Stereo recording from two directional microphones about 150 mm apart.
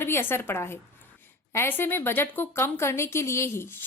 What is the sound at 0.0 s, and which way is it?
A woman's voice, 15° left (ahead or behind).